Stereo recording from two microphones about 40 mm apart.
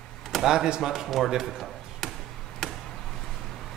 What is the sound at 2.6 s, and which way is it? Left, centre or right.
Chop, centre.